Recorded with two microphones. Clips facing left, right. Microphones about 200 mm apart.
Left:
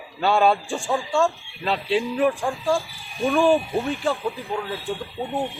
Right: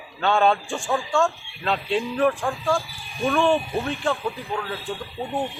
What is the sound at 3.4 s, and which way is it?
Speech, centre (ahead or behind).